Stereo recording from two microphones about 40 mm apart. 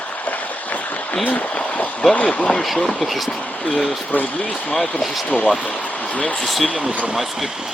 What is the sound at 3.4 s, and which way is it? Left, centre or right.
Speech, left.